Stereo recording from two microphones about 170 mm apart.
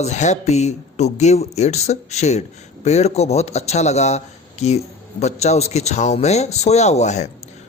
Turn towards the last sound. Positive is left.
turn(degrees=40)  # may be behind; listen again after turning